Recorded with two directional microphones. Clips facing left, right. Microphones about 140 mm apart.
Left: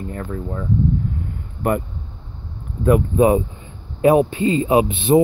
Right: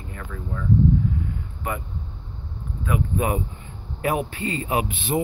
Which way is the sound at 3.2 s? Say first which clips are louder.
Left 10 dB; 25° left (ahead or behind).